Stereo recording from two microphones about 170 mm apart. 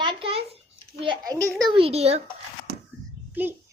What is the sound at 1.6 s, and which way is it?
Speech, 35° right (ahead or behind).